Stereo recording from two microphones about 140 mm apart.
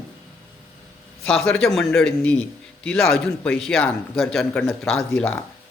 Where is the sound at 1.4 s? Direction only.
5° left (ahead or behind).